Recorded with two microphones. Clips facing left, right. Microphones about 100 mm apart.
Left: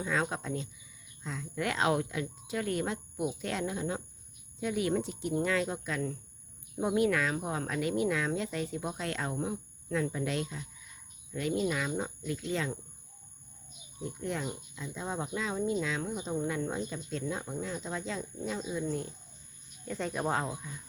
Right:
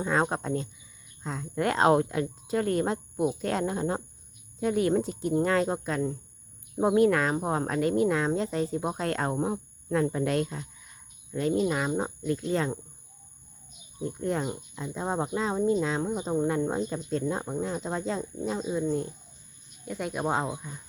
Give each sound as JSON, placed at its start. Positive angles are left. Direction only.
{"t": 0.0, "sound": "a woman's voice", "side_deg": -40}
{"t": 14.0, "sound": "speech", "side_deg": -40}
{"t": 19.8, "sound": "speech", "side_deg": -10}